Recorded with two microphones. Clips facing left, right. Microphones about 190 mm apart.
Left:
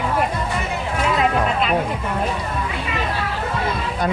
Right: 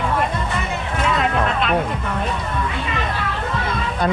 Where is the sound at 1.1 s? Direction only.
5° left (ahead or behind).